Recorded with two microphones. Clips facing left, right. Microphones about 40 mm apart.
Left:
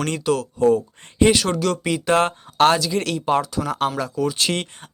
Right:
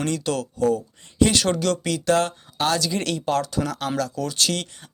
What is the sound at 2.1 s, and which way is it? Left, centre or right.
Speech, left.